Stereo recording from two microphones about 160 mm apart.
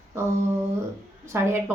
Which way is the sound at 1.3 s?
15° right (ahead or behind).